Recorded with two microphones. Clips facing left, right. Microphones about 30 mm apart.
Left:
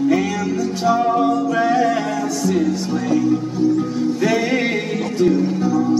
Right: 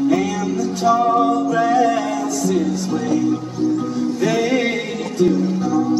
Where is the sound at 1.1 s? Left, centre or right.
Centre.